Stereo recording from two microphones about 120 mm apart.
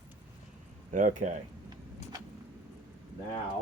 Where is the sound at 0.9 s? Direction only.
90° right.